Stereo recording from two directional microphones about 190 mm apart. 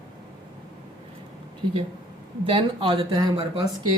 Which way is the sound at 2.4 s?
30° right (ahead or behind).